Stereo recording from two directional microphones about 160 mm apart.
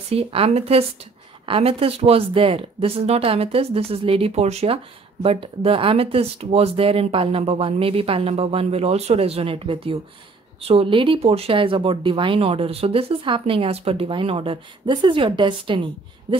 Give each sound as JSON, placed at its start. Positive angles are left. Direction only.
{"t": 0.1, "sound": "speech", "side_deg": -40}